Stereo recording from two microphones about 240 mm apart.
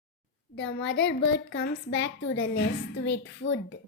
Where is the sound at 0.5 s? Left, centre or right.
Left.